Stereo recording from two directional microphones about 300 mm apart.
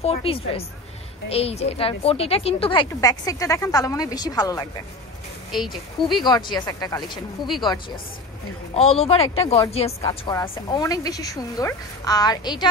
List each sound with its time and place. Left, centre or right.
0.0 s a woman's voice: centre
5.5 s speech: centre
6.2 s a woman's voice: centre